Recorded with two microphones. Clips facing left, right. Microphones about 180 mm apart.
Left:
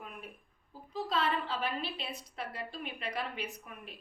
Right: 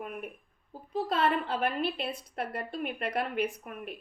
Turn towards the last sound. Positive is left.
turn(degrees=-55)  # may be behind; listen again after turning